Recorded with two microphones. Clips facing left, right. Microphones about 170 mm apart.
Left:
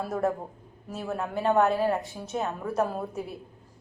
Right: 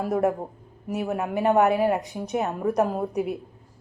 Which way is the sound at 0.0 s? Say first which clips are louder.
Right 5 dB; 15° right (ahead or behind).